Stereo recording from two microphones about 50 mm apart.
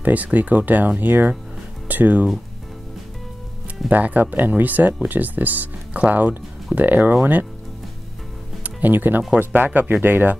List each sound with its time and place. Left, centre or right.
0.0 s speech: right
3.9 s speech: right
8.6 s speech: right